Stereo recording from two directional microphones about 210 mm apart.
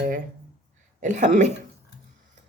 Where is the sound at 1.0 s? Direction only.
35° right (ahead or behind).